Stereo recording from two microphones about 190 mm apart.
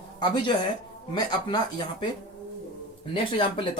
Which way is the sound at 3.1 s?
25° left (ahead or behind).